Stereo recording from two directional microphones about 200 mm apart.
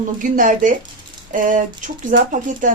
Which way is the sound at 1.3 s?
40° right (ahead or behind).